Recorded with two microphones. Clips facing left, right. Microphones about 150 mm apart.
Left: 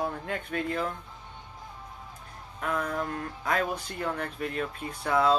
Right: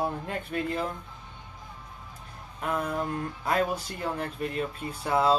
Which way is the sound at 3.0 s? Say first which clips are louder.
Right 2 dB; 35° right (ahead or behind).